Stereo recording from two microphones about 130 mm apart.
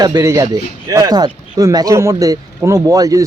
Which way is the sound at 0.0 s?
25° right (ahead or behind).